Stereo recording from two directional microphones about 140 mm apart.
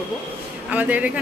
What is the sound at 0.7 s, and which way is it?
Speech, 10° right (ahead or behind).